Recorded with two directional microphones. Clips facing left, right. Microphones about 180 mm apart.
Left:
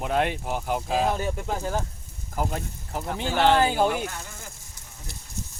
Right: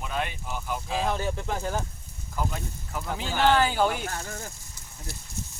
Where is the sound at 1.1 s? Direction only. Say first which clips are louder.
Left 1 dB; 10° left (ahead or behind).